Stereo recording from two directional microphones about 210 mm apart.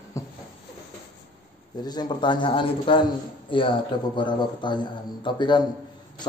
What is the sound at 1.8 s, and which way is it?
Speech, 20° left (ahead or behind).